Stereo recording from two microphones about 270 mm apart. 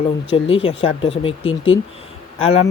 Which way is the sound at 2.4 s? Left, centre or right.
Left.